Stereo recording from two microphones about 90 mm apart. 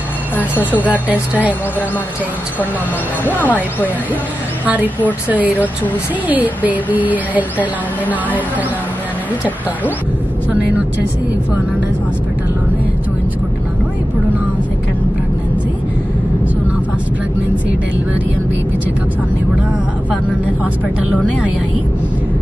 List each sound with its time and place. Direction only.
0.4 s speech: 20° left (ahead or behind)
0.8 s speech: 15° right (ahead or behind)
3.3 s speech: 20° left (ahead or behind)
4.8 s speech: 20° right (ahead or behind)